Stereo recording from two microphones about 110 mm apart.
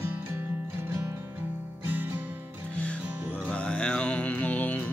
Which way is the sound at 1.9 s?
20° right (ahead or behind).